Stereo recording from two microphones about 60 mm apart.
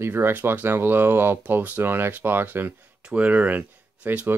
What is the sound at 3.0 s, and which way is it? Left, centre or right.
Speech, right.